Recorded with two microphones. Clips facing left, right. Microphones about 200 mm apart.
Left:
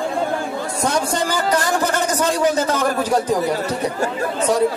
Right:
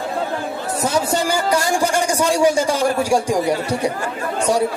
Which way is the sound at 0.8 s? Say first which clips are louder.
Right 1 dB; 5° right (ahead or behind).